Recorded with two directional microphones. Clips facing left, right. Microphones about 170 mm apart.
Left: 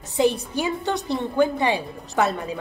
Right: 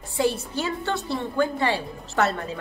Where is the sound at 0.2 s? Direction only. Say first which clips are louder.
Left 3 dB; 15° left (ahead or behind).